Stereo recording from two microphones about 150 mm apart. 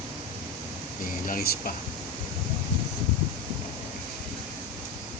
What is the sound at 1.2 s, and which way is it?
Speech, 70° left (ahead or behind).